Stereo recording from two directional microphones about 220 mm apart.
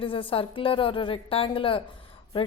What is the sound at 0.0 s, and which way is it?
A woman's voice, 25° left (ahead or behind).